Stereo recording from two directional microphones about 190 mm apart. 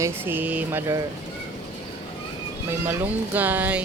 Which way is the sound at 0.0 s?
10° right (ahead or behind).